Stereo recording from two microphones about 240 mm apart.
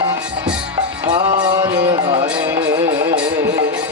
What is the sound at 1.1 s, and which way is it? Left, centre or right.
Music, centre.